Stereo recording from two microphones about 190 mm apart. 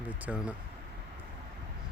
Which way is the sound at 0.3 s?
5° right (ahead or behind).